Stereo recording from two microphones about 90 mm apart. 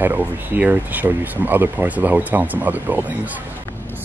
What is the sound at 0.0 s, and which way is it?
Speech, 20° right (ahead or behind).